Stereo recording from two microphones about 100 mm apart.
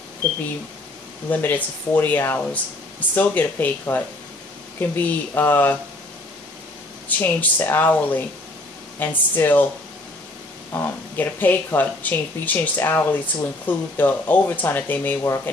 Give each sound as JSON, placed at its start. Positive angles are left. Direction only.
{"t": 1.3, "sound": "speech", "side_deg": 20}
{"t": 7.1, "sound": "speech", "side_deg": 15}
{"t": 10.7, "sound": "speech", "side_deg": 20}